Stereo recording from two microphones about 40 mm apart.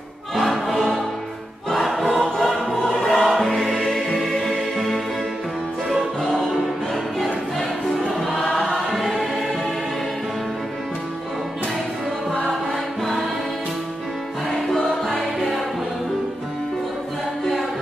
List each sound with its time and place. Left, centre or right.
0.4 s music: centre
1.7 s choir: centre
4.2 s music: centre
8.4 s choir: centre
14.5 s music: centre